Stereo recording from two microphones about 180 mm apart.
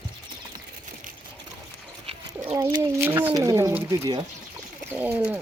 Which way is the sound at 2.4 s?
10° right (ahead or behind).